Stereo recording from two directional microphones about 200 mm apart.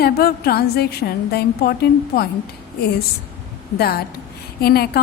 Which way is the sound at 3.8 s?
50° left (ahead or behind).